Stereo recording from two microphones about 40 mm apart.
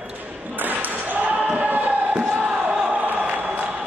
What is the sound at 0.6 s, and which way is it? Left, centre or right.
Basketball bounce, right.